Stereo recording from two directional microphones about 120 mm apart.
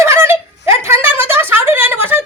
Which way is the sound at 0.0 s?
25° right (ahead or behind).